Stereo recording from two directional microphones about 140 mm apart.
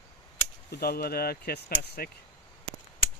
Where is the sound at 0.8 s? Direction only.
90° left.